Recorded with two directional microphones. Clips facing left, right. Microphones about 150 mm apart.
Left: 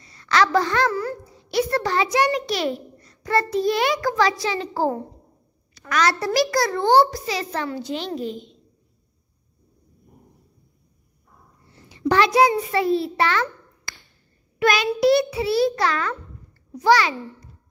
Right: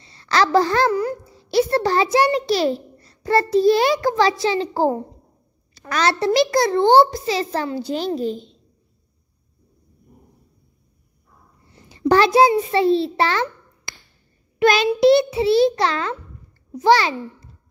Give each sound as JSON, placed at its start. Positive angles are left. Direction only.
{"t": 0.0, "sound": "a sound", "side_deg": -30}
{"t": 1.4, "sound": "a child's voice", "side_deg": -30}
{"t": 11.9, "sound": "a child's voice", "side_deg": -35}
{"t": 14.6, "sound": "child singing", "side_deg": -30}
{"t": 15.0, "sound": "a child's voice", "side_deg": -25}